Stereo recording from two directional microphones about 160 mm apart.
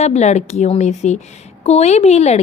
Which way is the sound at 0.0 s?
45° left (ahead or behind).